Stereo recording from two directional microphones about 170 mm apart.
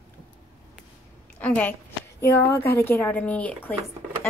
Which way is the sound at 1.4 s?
10° left (ahead or behind).